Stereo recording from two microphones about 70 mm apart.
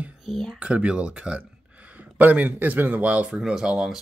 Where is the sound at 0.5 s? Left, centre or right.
Centre.